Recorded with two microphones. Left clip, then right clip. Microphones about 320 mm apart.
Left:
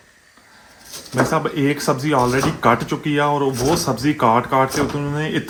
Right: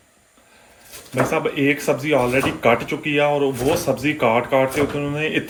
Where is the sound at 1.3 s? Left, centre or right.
Left.